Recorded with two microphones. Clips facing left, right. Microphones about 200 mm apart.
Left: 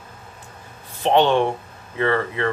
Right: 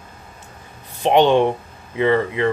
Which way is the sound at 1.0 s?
15° right (ahead or behind).